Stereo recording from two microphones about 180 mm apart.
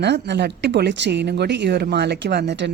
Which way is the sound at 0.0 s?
70° right (ahead or behind).